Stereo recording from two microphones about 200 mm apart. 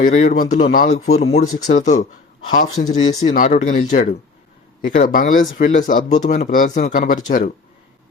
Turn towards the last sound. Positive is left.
turn(degrees=45)  # may be behind; listen again after turning